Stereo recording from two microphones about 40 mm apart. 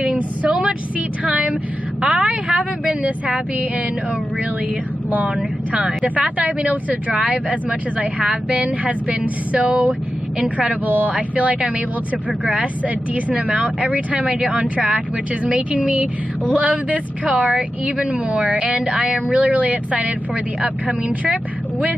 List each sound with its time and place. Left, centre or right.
1.2 s a woman's voice: right
5.1 s speech: right
8.5 s speech: right
10.7 s a woman's voice: right
19.3 s speech: right